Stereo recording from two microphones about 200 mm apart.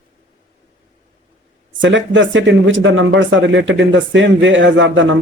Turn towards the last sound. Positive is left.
turn(degrees=-70)  # may be behind; listen again after turning